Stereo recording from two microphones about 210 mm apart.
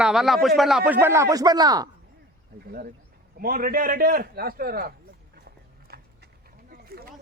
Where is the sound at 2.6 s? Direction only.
45° right (ahead or behind).